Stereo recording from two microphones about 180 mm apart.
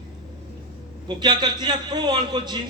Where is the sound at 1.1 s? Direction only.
25° right (ahead or behind).